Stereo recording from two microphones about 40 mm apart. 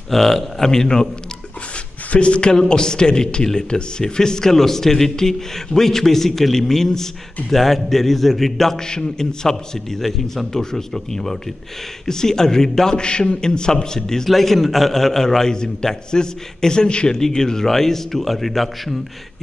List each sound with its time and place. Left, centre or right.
0.1 s a man's voice: centre
2.1 s a man's voice: left
2.5 s a man's voice: centre
8.7 s a man's voice: centre